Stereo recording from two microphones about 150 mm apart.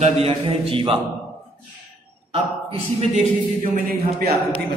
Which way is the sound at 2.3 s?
40° right (ahead or behind).